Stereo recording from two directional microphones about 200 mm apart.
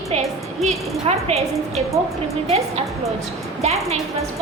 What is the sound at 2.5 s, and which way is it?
Speech, 30° right (ahead or behind).